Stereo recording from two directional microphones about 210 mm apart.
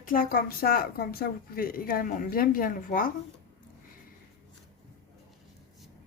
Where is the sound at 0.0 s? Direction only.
40° left (ahead or behind).